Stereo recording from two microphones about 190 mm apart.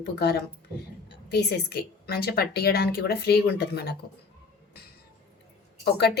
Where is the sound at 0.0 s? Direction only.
60° left (ahead or behind).